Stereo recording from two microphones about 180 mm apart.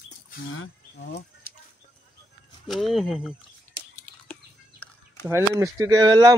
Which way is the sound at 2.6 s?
Centre (ahead or behind).